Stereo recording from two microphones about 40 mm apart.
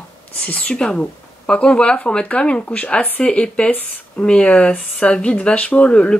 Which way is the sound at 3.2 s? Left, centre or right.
Left.